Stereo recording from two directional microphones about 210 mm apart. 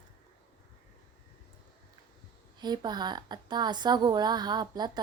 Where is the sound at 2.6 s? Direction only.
20° right (ahead or behind).